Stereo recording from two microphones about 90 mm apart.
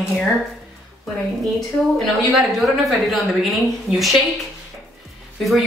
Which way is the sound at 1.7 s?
Centre (ahead or behind).